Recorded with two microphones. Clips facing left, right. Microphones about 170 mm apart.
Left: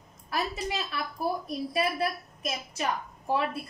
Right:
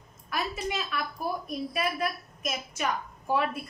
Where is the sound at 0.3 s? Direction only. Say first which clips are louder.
Even; 35° left (ahead or behind).